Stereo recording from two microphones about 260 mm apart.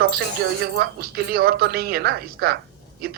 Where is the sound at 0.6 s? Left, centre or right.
Right.